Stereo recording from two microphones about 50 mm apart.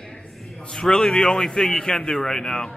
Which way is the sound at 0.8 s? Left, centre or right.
Centre.